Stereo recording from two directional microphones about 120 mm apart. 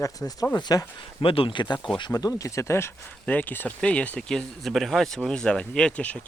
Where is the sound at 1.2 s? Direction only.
50° left (ahead or behind).